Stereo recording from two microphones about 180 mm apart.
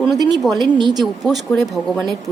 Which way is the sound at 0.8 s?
25° right (ahead or behind).